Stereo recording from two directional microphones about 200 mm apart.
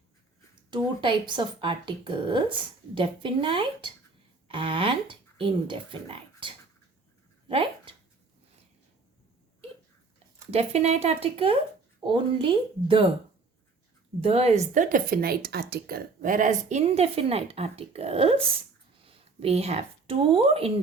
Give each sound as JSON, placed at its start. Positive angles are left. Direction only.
{"t": 0.7, "sound": "speech", "side_deg": -25}
{"t": 7.4, "sound": "a sound", "side_deg": -25}
{"t": 10.5, "sound": "a woman's voice", "side_deg": -30}
{"t": 14.2, "sound": "a woman's voice", "side_deg": -30}